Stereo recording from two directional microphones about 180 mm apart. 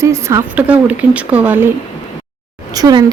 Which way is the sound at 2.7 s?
20° right (ahead or behind).